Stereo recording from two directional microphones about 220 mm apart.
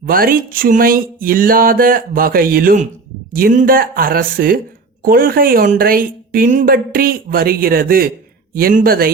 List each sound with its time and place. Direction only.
0.0 s a woman's voice: 40° right (ahead or behind)